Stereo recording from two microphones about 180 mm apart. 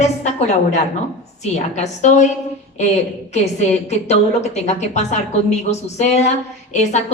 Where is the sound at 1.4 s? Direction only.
40° left (ahead or behind).